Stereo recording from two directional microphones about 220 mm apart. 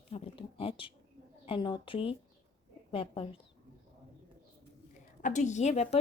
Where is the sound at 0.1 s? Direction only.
25° left (ahead or behind).